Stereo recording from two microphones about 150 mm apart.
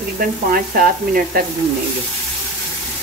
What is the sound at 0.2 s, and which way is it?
Frying, 70° right (ahead or behind).